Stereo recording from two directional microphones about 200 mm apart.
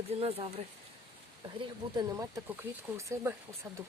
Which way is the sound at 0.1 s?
30° right (ahead or behind).